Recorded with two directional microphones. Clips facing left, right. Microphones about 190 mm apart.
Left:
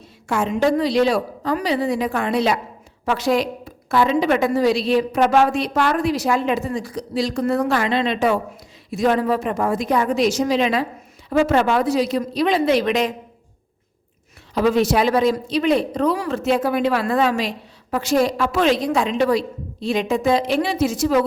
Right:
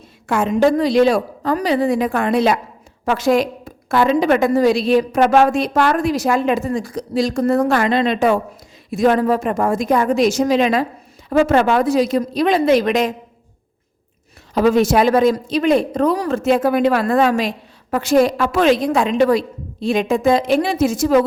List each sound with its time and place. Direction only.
0.3 s a woman's voice: 50° right (ahead or behind)
14.5 s a woman's voice: 45° right (ahead or behind)